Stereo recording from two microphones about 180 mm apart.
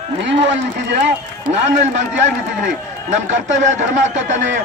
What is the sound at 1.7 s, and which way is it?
Speech, 40° right (ahead or behind).